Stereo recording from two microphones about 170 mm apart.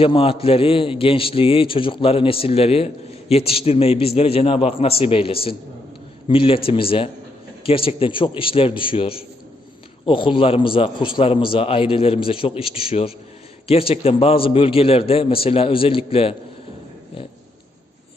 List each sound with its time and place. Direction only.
0.0 s a man's voice: 35° left (ahead or behind)